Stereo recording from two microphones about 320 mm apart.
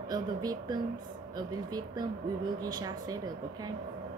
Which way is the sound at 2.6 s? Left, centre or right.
Centre.